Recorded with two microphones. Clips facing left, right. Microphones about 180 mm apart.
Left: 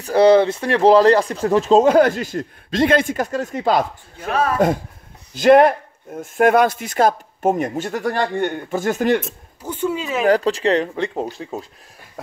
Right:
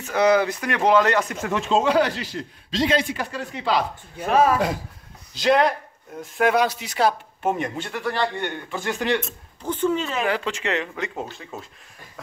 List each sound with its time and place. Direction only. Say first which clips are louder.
0.0 s speech: left 6 dB; 30° left (ahead or behind)
4.2 s speech: right 2 dB; 10° right (ahead or behind)
5.3 s speech: left 8 dB; 50° left (ahead or behind)
9.2 s speech: even; 10° left (ahead or behind)
10.2 s speech: left 9 dB; 40° left (ahead or behind)